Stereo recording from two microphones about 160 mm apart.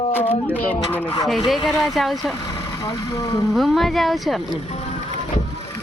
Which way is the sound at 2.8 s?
25° left (ahead or behind).